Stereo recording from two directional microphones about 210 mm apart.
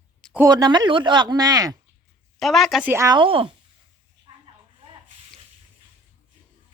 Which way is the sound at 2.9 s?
15° right (ahead or behind).